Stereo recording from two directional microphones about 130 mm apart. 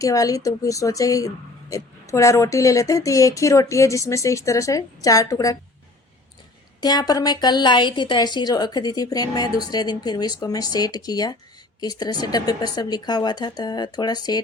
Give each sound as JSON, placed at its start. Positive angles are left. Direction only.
{"t": 0.0, "sound": "speech", "side_deg": 25}
{"t": 6.8, "sound": "a woman's voice", "side_deg": 30}